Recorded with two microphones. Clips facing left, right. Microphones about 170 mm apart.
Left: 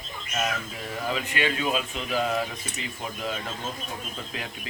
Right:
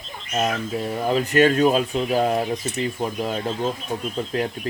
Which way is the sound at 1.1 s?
40° right (ahead or behind).